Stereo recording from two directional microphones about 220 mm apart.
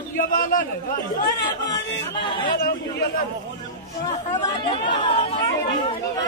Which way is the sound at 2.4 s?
45° left (ahead or behind).